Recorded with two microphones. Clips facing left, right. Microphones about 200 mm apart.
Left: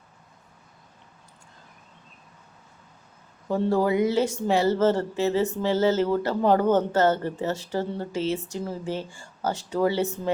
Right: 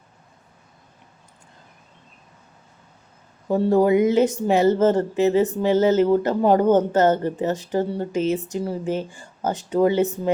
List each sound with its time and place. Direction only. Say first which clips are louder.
3.5 s speech: right 5 dB; 20° right (ahead or behind)